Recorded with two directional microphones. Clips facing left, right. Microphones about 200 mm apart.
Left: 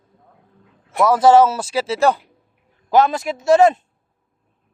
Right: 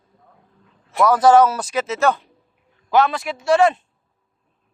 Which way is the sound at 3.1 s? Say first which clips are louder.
Left 3 dB; 45° left (ahead or behind).